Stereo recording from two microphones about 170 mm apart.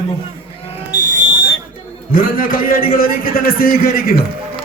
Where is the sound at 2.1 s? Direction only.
55° left (ahead or behind).